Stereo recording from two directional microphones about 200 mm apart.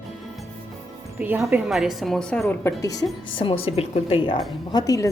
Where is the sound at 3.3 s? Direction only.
25° left (ahead or behind).